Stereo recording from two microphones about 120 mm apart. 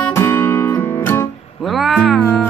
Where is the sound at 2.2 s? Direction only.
15° left (ahead or behind).